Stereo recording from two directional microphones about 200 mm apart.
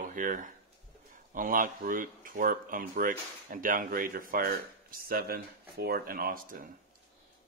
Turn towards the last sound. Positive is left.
turn(degrees=-45)  # may be behind; listen again after turning